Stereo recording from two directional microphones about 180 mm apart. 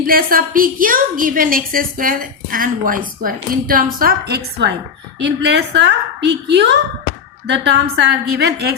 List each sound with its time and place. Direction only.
0.1 s a woman's voice: 55° right (ahead or behind)
5.2 s a woman's voice: 75° right (ahead or behind)